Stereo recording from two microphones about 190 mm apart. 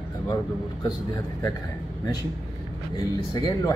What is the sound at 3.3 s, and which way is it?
Speech, 20° left (ahead or behind).